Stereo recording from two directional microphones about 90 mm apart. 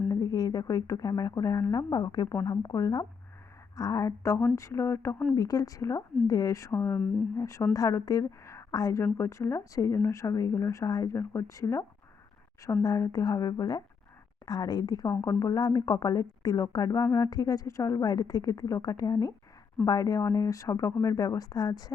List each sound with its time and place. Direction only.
0.1 s a woman's voice: 45° left (ahead or behind)
5.4 s a woman's voice: 40° left (ahead or behind)
6.7 s speech: 25° left (ahead or behind)
7.3 s a woman's voice: 35° left (ahead or behind)
9.1 s a woman's voice: 30° left (ahead or behind); by 21.9 s 45° left (ahead or behind)